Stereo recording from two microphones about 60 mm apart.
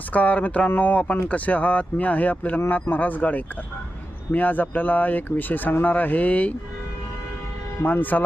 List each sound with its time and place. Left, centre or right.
0.1 s speech: left
7.8 s speech: left